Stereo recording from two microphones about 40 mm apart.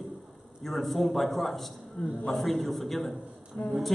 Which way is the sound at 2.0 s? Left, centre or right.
Left.